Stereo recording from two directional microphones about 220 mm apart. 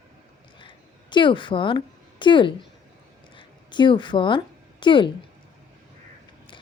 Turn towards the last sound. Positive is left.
turn(degrees=20)  # may be behind; listen again after turning